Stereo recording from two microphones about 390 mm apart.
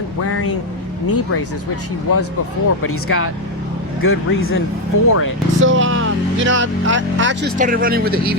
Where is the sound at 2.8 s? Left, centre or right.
Left.